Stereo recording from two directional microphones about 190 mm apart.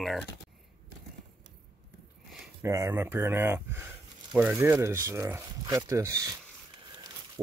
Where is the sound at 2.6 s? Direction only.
15° right (ahead or behind).